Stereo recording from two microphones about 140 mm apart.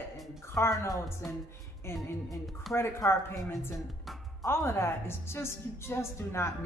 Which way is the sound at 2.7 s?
20° left (ahead or behind).